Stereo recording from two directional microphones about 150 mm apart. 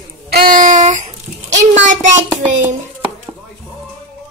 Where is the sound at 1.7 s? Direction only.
55° right (ahead or behind).